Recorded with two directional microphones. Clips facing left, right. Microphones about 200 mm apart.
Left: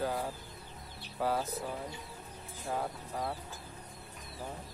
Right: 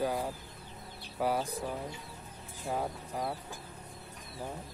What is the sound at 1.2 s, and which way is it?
Speech, 15° right (ahead or behind).